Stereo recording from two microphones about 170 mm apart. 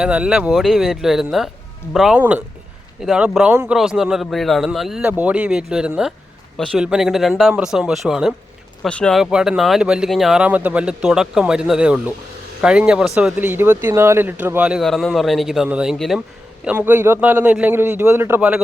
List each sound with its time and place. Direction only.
0.0 s a man's voice: 5° right (ahead or behind)